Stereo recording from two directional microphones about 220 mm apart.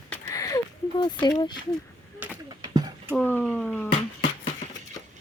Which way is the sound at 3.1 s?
5° left (ahead or behind).